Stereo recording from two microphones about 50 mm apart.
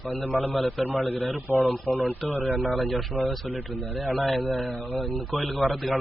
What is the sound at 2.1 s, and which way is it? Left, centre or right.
Speech, left.